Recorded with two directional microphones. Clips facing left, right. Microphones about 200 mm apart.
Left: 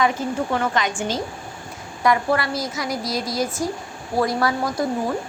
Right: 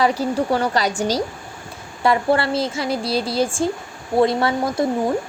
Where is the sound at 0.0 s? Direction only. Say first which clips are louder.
Right 3 dB; 35° right (ahead or behind).